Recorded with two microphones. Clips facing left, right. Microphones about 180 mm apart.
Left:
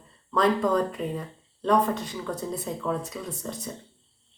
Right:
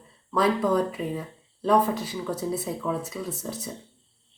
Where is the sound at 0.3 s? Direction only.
5° right (ahead or behind).